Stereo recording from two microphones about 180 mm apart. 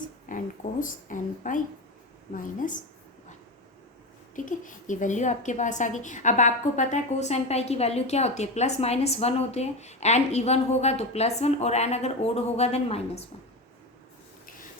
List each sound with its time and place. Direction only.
0.3 s speech: 50° left (ahead or behind)
4.4 s a woman's voice: 45° left (ahead or behind)